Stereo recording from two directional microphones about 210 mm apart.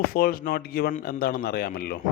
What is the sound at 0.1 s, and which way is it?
A man's voice, 45° left (ahead or behind).